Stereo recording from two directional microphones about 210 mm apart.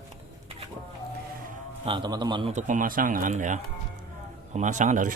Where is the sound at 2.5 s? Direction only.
35° right (ahead or behind).